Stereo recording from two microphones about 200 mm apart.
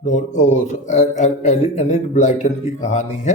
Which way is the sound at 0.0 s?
35° left (ahead or behind).